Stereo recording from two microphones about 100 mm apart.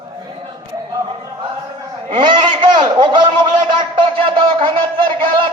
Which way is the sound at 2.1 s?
55° right (ahead or behind).